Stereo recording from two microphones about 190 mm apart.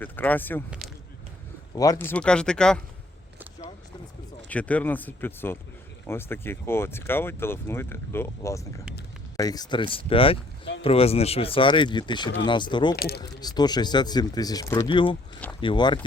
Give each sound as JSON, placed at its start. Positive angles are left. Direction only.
{"t": 0.0, "sound": "speech", "side_deg": 10}
{"t": 1.7, "sound": "speech", "side_deg": 20}
{"t": 4.4, "sound": "speech", "side_deg": 5}
{"t": 13.0, "sound": "speech", "side_deg": 55}
{"t": 13.4, "sound": "speech", "side_deg": 20}